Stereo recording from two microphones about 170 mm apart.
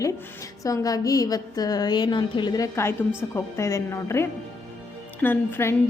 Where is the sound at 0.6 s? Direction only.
20° left (ahead or behind).